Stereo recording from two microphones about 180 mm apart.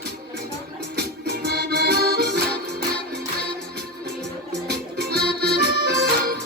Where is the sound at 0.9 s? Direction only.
65° right (ahead or behind).